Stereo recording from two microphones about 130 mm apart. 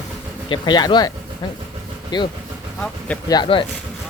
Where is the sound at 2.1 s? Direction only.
35° left (ahead or behind).